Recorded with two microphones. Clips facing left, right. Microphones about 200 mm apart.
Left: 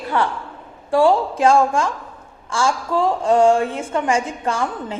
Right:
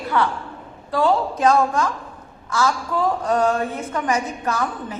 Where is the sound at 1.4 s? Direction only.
30° left (ahead or behind).